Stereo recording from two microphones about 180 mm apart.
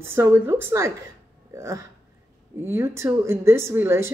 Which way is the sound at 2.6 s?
15° right (ahead or behind).